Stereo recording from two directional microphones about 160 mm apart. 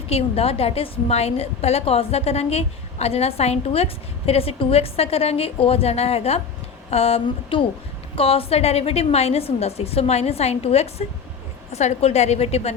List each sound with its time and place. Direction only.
0.1 s a woman's voice: 40° left (ahead or behind)